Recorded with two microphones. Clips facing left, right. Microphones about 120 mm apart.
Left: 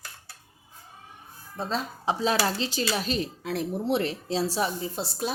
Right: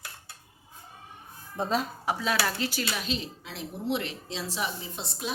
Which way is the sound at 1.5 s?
15° right (ahead or behind).